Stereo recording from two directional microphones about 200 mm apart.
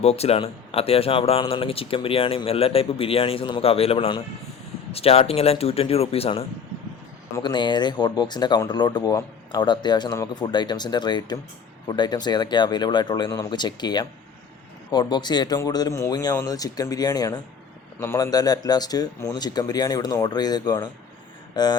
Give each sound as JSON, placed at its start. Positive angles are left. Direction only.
{"t": 0.0, "sound": "speech", "side_deg": 30}